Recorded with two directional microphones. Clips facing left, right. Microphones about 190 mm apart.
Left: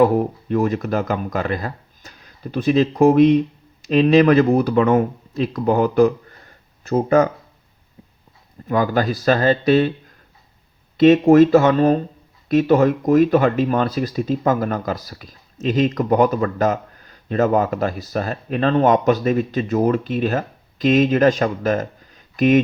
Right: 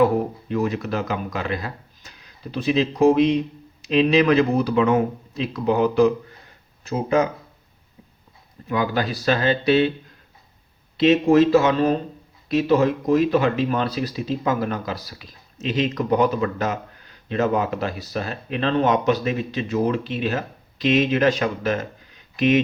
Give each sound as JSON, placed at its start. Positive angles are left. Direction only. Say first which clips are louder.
{"t": 0.0, "sound": "speech", "louder": "left 3 dB", "side_deg": 45}
{"t": 8.6, "sound": "speech", "louder": "left 4 dB", "side_deg": 45}
{"t": 10.9, "sound": "speech", "louder": "left 5 dB", "side_deg": 45}